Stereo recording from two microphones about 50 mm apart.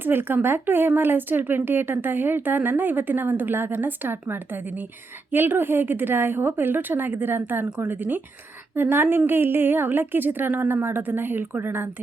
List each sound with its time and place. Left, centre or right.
0.0 s speech: right